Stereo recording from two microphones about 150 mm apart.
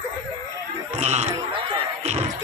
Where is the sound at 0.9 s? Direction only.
45° right (ahead or behind).